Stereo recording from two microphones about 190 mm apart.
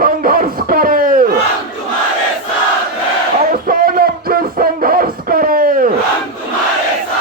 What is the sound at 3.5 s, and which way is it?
Music, 50° right (ahead or behind).